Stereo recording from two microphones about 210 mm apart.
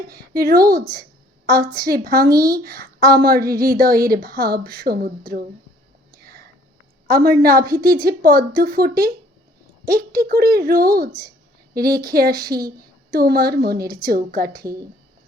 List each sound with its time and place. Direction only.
0.3 s a woman's voice: 45° right (ahead or behind)
6.1 s whispering: 45° right (ahead or behind)
7.1 s a woman's voice: 45° right (ahead or behind)
14.5 s speech: 15° right (ahead or behind)